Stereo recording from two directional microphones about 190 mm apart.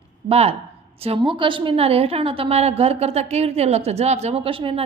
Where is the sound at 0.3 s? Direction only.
30° right (ahead or behind).